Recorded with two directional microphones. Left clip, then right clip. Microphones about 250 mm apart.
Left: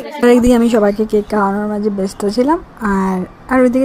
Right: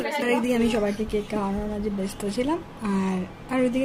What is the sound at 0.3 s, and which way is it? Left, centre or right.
A woman's voice, left.